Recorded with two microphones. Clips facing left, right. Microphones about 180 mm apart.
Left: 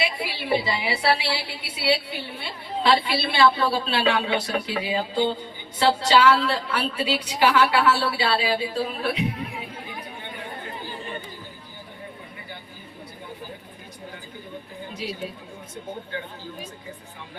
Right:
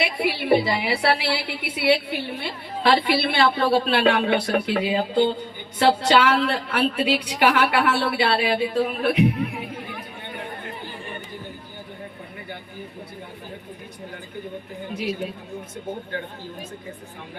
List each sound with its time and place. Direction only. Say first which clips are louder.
0.0 s a woman's voice: right 5 dB; 55° right (ahead or behind)